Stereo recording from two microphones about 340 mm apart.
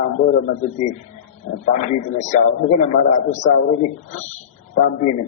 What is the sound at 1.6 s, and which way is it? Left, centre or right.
A man's voice, left.